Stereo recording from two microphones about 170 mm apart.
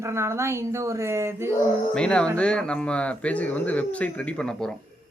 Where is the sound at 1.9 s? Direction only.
5° left (ahead or behind).